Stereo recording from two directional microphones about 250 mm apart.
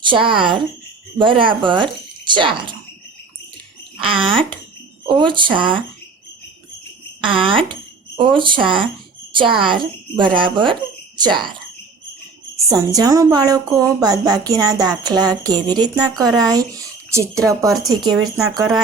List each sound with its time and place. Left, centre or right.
0.0 s speech: centre
4.0 s speech: right
7.2 s a sound: right
8.4 s speech: centre
12.7 s a woman's voice: centre